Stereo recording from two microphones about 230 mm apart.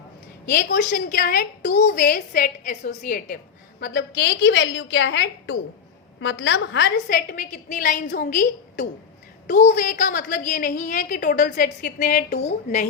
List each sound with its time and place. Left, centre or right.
0.4 s a woman's voice: left